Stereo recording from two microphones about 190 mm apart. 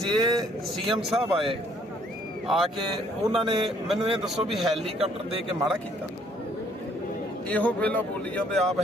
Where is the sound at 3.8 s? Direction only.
Centre (ahead or behind).